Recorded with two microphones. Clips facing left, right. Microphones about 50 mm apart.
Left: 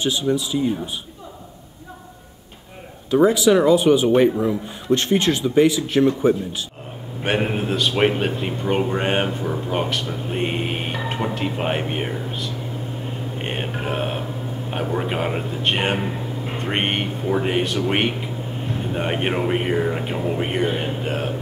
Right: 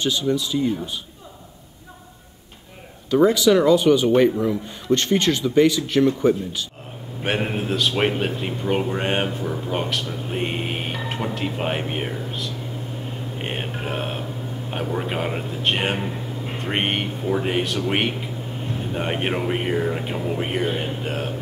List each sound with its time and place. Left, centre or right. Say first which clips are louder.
0.0 s speech: left 1 dB; centre
3.1 s speech: left 1 dB; centre
7.2 s speech: left 2 dB; centre